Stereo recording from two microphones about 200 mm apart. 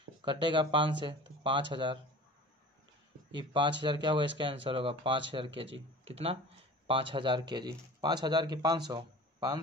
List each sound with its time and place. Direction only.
0.2 s speech: 25° right (ahead or behind)
3.3 s speech: 25° right (ahead or behind)